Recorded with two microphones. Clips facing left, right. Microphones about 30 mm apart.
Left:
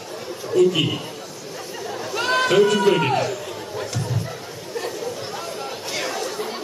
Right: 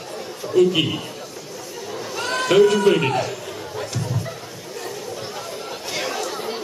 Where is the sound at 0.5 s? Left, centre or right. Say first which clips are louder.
Right 1 dB; centre.